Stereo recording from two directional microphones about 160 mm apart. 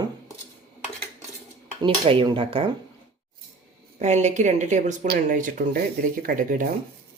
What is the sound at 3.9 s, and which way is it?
A woman's voice, 45° right (ahead or behind).